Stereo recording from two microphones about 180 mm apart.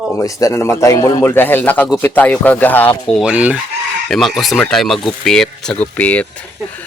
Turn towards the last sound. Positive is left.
turn(degrees=5)  # may be behind; listen again after turning